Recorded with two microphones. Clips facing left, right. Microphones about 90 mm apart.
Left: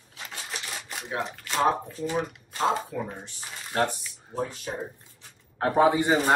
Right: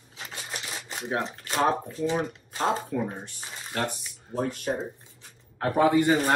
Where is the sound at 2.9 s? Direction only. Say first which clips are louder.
Right 4 dB; 55° right (ahead or behind).